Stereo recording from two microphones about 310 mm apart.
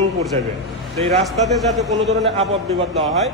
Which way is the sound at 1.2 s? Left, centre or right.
Centre.